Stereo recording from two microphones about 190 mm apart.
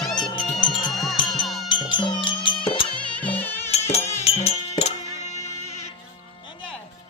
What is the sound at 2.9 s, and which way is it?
Music, 5° left (ahead or behind).